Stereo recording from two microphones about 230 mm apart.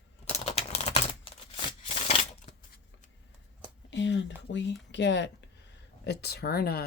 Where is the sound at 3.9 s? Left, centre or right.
Left.